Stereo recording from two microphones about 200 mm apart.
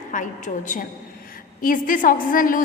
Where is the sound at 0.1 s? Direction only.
40° left (ahead or behind).